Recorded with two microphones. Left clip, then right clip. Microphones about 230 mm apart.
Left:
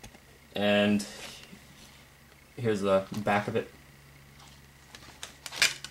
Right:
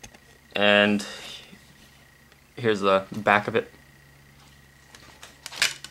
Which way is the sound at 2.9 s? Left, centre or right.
Centre.